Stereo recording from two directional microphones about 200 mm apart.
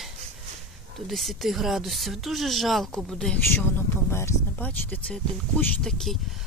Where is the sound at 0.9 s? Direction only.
Centre (ahead or behind).